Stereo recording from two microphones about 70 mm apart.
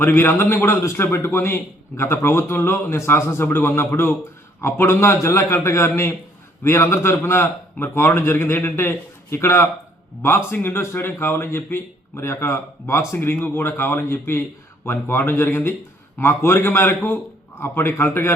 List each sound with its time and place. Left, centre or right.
0.0 s a man's voice: left